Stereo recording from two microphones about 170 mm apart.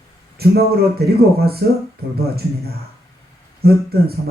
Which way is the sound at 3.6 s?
65° right (ahead or behind).